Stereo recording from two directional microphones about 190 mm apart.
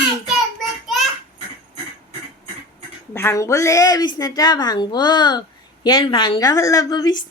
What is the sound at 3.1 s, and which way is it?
A woman's voice, 15° left (ahead or behind).